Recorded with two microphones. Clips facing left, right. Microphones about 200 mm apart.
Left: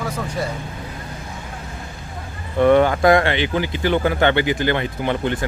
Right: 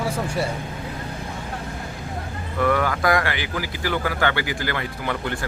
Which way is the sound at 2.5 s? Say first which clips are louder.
Left 7 dB; 25° left (ahead or behind).